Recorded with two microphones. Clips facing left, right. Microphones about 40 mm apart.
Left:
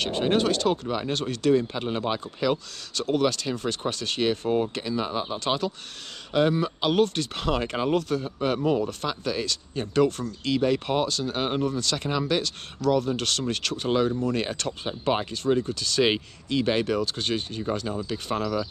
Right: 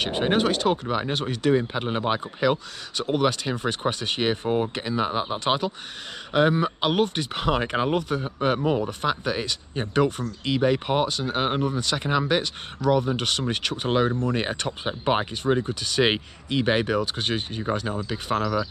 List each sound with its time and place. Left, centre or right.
0.0 s speech: centre